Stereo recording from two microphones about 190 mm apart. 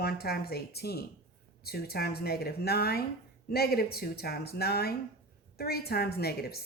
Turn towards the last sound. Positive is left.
turn(degrees=55)  # may be behind; listen again after turning